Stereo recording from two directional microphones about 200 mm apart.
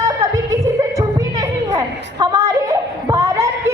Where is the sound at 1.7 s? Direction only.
20° right (ahead or behind).